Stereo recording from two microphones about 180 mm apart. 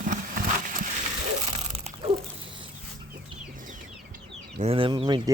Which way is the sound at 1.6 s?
35° right (ahead or behind).